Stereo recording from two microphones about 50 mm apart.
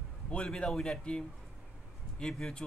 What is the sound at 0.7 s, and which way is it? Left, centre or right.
Speech, centre.